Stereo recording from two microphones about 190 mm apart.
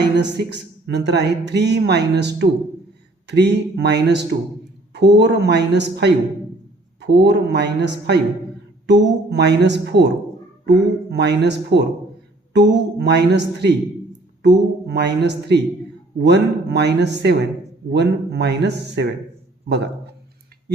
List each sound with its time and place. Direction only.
0.2 s a man's voice: 60° right (ahead or behind)